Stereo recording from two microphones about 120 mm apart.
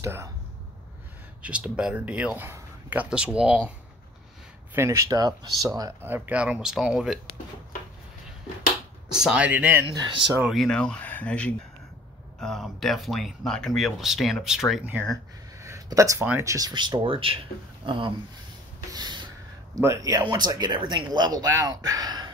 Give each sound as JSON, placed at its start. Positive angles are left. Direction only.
{"t": 0.0, "sound": "speech", "side_deg": -20}
{"t": 1.4, "sound": "a man's voice", "side_deg": -10}
{"t": 4.7, "sound": "speech", "side_deg": -25}
{"t": 6.0, "sound": "a man's voice", "side_deg": -15}
{"t": 9.1, "sound": "a man's voice", "side_deg": -5}
{"t": 9.8, "sound": "speech", "side_deg": -40}
{"t": 10.5, "sound": "speech", "side_deg": 5}
{"t": 15.6, "sound": "a sound", "side_deg": -25}
{"t": 16.3, "sound": "speech", "side_deg": -25}
{"t": 18.9, "sound": "a sound", "side_deg": -35}
{"t": 19.7, "sound": "speech", "side_deg": -25}